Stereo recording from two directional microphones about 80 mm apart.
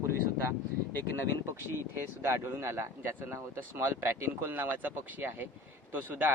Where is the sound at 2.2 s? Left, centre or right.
Right.